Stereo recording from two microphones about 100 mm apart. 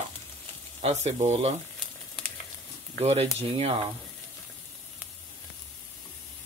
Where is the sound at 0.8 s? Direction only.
90° right.